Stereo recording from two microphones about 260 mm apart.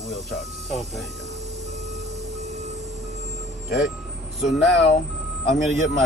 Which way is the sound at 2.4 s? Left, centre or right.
Right.